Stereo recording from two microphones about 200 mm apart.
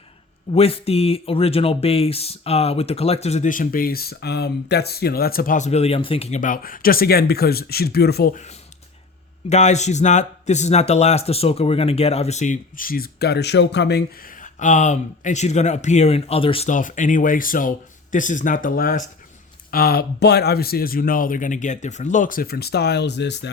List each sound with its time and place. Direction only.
0.5 s speech: 30° left (ahead or behind); by 14.3 s 55° left (ahead or behind)
14.4 s speech: 40° left (ahead or behind)
16.6 s speech: 40° left (ahead or behind); by 23.5 s 60° left (ahead or behind)